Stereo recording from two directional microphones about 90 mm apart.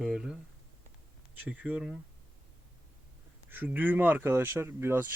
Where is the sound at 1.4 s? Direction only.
15° right (ahead or behind).